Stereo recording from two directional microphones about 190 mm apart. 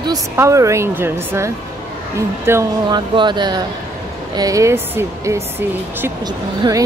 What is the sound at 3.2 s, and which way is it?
A woman's voice, 25° right (ahead or behind).